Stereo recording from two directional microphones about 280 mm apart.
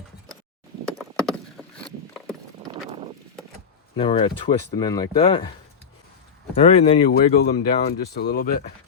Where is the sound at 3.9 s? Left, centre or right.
Centre.